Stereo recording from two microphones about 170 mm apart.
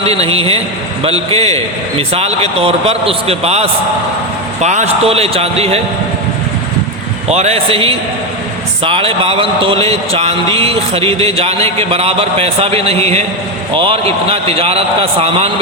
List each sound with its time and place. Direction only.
0.0 s a man's voice: 35° right (ahead or behind)
7.3 s a man's voice: 40° right (ahead or behind)